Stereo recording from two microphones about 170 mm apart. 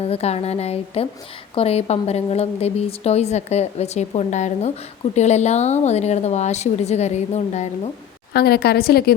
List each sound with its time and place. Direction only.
0.0 s a woman's voice: 35° left (ahead or behind)
8.3 s a woman's voice: 70° left (ahead or behind)